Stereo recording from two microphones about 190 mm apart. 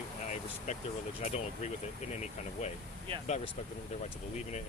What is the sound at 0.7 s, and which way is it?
Speech, 35° left (ahead or behind).